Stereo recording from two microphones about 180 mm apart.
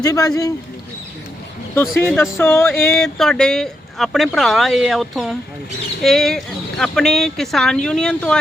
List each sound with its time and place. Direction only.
0.0 s a man's voice: 20° left (ahead or behind)
2.0 s music: 10° left (ahead or behind)
3.0 s speech: 5° left (ahead or behind)